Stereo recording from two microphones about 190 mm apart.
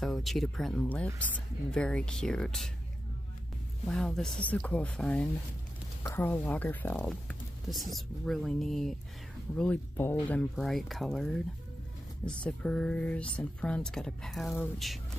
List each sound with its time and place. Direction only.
0.0 s speech: centre (ahead or behind)
3.9 s speech: 5° left (ahead or behind)